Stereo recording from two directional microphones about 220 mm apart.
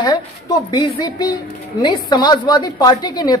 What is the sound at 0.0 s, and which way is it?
A woman's voice, 15° left (ahead or behind).